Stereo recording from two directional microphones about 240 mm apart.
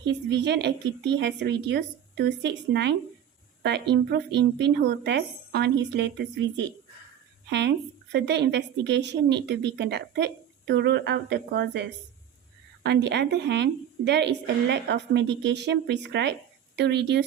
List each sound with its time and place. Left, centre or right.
0.0 s speech: right
8.1 s speech: right